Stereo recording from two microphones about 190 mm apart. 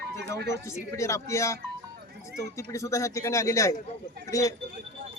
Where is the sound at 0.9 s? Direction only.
15° left (ahead or behind).